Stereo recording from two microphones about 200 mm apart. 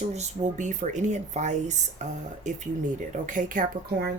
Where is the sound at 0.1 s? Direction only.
35° right (ahead or behind).